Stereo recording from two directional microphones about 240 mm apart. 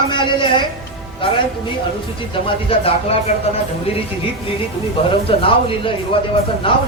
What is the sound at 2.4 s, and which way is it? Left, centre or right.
Speech, left.